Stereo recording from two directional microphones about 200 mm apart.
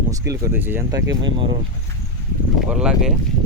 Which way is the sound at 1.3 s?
25° right (ahead or behind).